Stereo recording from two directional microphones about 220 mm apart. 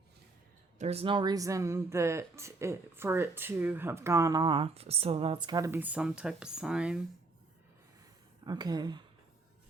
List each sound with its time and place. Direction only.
0.8 s speech: 25° right (ahead or behind); by 7.0 s 5° right (ahead or behind)
8.4 s speech: 20° right (ahead or behind)